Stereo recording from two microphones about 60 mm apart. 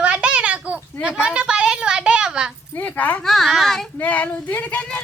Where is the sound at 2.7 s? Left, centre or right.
Left.